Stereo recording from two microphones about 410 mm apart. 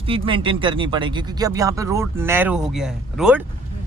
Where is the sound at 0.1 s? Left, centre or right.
Centre.